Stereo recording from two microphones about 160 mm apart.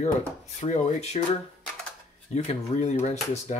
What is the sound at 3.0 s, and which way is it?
Speech, 45° left (ahead or behind).